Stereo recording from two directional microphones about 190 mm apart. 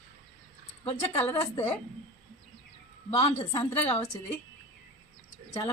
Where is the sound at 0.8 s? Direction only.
30° left (ahead or behind).